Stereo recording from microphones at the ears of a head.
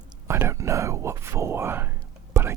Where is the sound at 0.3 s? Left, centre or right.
Right.